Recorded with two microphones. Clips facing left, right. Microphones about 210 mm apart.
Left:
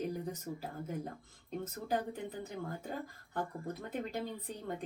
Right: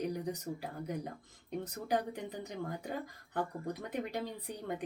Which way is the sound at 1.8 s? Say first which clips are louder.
Right 1 dB; 15° right (ahead or behind).